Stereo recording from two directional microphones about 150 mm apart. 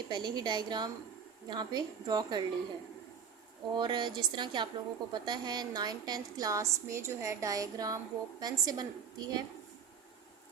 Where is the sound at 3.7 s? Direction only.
30° right (ahead or behind).